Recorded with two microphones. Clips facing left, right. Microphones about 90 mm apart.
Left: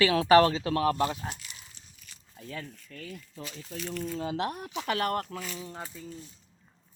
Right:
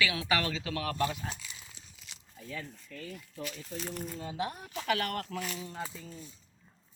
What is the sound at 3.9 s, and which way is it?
Speech, 85° left.